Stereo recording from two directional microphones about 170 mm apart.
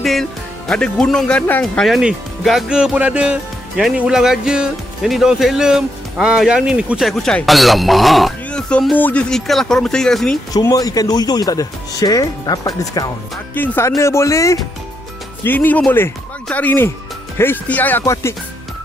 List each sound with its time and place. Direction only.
0.0 s speech: centre (ahead or behind)
10.5 s speech: 20° left (ahead or behind)